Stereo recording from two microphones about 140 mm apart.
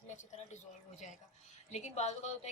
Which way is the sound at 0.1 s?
55° left (ahead or behind).